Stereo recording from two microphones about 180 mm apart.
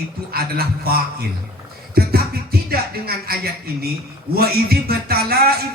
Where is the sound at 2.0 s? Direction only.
60° right (ahead or behind).